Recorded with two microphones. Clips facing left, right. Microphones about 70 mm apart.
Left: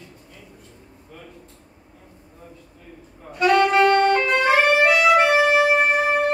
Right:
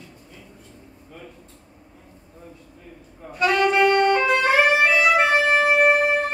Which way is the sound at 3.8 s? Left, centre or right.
Centre.